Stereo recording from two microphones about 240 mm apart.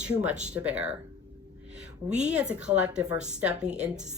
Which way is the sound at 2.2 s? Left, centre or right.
Centre.